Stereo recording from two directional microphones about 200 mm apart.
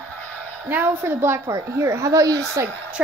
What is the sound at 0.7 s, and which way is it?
A woman's voice, 10° right (ahead or behind).